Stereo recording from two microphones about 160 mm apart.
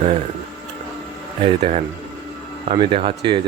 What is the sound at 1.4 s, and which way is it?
Speech, 35° right (ahead or behind).